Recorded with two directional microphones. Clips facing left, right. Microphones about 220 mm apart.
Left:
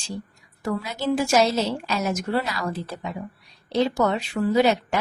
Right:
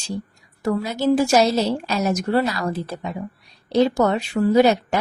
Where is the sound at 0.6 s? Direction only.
40° right (ahead or behind).